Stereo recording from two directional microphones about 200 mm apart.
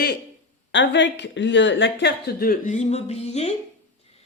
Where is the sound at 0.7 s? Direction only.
65° left (ahead or behind).